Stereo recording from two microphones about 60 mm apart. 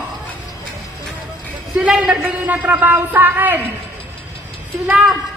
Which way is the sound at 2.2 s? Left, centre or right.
Right.